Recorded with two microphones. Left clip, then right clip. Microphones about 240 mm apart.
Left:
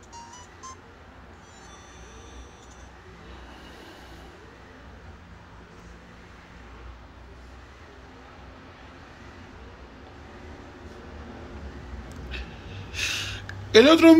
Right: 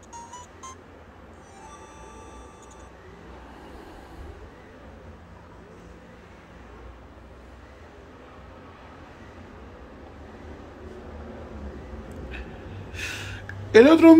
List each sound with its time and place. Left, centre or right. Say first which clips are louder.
12.9 s gasp: left 5 dB; centre